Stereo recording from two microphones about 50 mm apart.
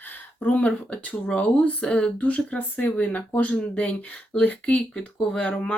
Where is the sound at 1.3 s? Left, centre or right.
Left.